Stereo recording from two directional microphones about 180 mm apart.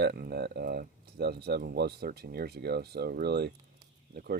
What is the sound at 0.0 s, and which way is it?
Speech, 60° right (ahead or behind).